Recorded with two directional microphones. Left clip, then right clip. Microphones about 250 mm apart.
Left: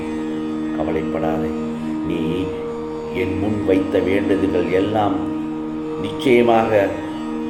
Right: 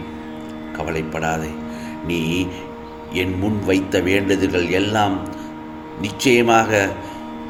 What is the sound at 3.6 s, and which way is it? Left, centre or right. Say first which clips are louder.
Speech: left 1 dB; right.